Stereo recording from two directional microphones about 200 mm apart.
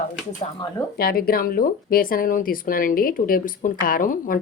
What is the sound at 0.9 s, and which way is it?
Speech, 50° left (ahead or behind).